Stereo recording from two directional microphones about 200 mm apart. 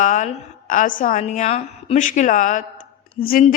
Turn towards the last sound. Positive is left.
turn(degrees=45)  # may be behind; listen again after turning